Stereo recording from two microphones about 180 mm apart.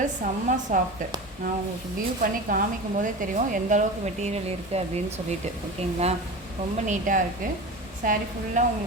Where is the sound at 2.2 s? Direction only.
50° right (ahead or behind).